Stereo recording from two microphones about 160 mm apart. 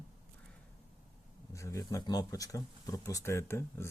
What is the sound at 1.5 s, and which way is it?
Speech, 20° left (ahead or behind).